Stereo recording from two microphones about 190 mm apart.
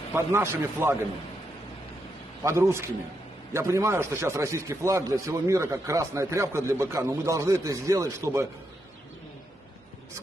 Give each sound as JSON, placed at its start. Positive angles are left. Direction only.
{"t": 0.1, "sound": "speech", "side_deg": -10}
{"t": 2.4, "sound": "speech", "side_deg": -15}